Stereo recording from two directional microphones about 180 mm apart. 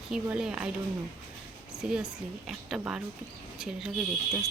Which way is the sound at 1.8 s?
5° right (ahead or behind).